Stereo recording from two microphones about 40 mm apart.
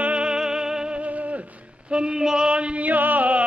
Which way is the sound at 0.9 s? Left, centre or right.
Right.